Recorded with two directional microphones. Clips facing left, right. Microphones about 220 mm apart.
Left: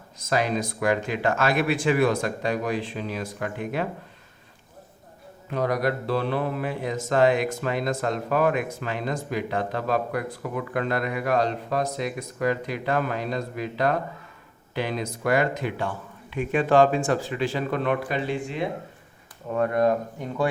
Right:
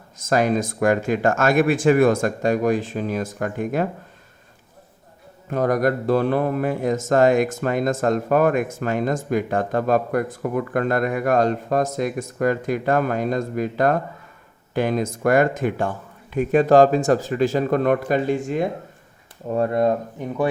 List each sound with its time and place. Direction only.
0.2 s speech: 45° right (ahead or behind)
5.5 s speech: 45° right (ahead or behind)
19.5 s speech: 30° right (ahead or behind); by 20.5 s 15° right (ahead or behind)